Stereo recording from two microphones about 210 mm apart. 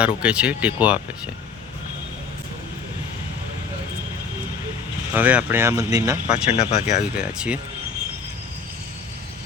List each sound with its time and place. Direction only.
0.0 s speech: 5° right (ahead or behind)
5.1 s speech: 5° right (ahead or behind)
6.5 s speech: 30° left (ahead or behind)
7.2 s speech: 5° right (ahead or behind)